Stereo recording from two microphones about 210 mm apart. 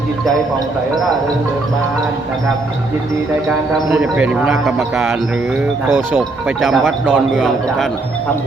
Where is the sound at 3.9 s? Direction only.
5° right (ahead or behind).